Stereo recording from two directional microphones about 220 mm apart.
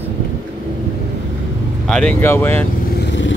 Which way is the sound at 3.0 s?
55° left (ahead or behind).